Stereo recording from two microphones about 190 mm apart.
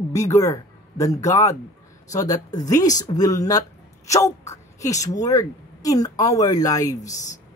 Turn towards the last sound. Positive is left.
turn(degrees=20)  # may be behind; listen again after turning